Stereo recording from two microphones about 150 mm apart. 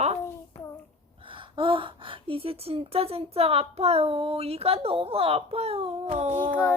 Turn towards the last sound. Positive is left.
turn(degrees=10)  # may be behind; listen again after turning